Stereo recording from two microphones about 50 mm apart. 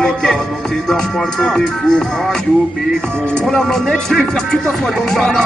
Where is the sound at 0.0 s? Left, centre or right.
Centre.